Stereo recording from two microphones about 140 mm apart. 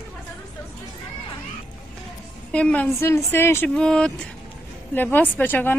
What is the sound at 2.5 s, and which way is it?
Speech, 10° left (ahead or behind).